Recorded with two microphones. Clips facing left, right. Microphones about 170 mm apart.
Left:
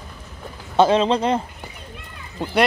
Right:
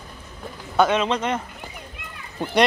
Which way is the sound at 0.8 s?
30° left (ahead or behind).